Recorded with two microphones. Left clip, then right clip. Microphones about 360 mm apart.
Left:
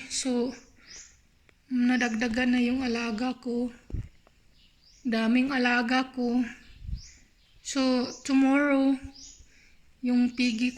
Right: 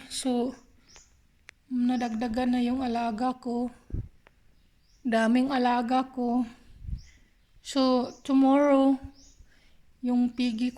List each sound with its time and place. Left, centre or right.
0.0 s a woman's voice: right
1.7 s speech: centre
5.0 s speech: centre
7.6 s speech: centre